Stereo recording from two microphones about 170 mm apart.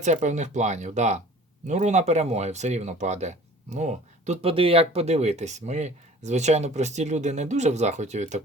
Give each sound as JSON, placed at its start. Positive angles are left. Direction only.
{"t": 0.0, "sound": "speech", "side_deg": -45}